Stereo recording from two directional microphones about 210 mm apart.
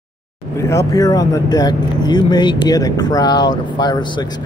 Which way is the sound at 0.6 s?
15° left (ahead or behind).